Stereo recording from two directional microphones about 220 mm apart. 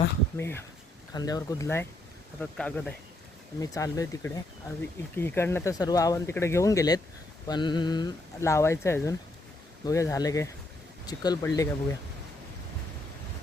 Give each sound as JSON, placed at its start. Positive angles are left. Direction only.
{"t": 0.3, "sound": "speech", "side_deg": 10}
{"t": 3.6, "sound": "speech", "side_deg": 15}